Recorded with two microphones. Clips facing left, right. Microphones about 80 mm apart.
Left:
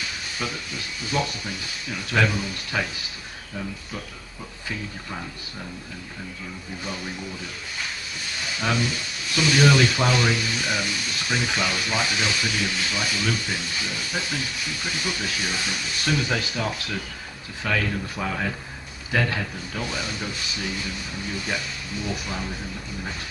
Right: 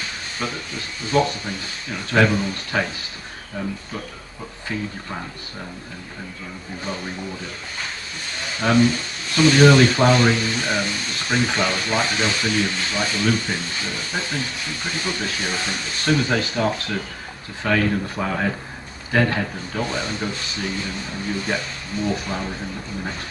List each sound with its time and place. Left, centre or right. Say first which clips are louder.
0.0 s speech: right 2 dB; right
8.4 s speech: right 8 dB; right